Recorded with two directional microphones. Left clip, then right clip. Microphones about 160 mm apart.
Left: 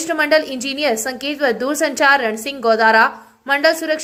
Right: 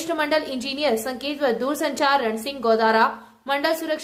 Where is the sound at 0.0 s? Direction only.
10° left (ahead or behind).